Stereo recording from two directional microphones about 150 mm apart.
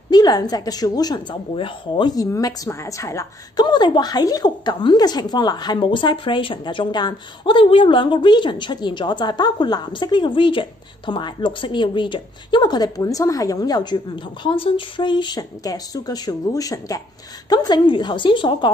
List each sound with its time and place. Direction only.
0.1 s a woman's voice: 25° left (ahead or behind)